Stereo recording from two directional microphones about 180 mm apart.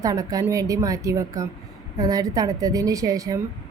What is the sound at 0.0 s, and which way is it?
A woman's voice, 20° right (ahead or behind).